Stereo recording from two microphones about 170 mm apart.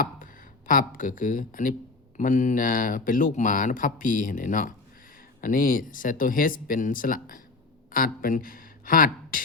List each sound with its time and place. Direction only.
0.7 s speech: 50° left (ahead or behind)